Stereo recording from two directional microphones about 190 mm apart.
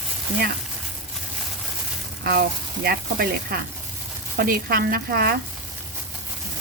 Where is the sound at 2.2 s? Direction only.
55° right (ahead or behind).